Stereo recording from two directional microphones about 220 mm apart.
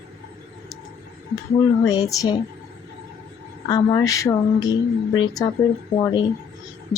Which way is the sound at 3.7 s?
15° left (ahead or behind).